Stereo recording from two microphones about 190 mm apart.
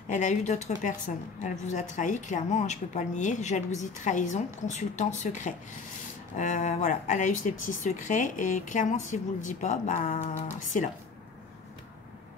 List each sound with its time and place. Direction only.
0.1 s a woman's voice: 40° left (ahead or behind)